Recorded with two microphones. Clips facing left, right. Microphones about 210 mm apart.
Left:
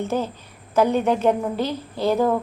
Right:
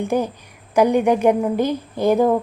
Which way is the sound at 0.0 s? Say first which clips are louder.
Right 4 dB; 15° right (ahead or behind).